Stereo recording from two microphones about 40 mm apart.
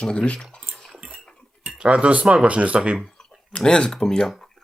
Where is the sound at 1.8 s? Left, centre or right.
Right.